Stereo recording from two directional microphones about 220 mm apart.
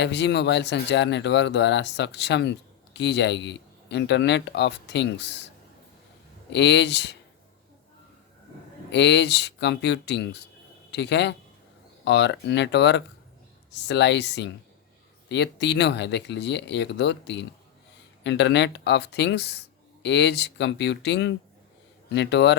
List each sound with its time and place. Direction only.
0.0 s speech: 50° left (ahead or behind)
6.5 s speech: 50° left (ahead or behind)
8.9 s speech: 50° left (ahead or behind)